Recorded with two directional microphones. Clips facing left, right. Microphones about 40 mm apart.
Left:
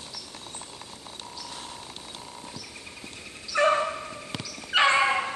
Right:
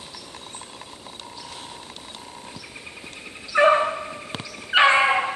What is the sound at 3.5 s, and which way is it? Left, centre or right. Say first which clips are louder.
Dog: right 6 dB; right.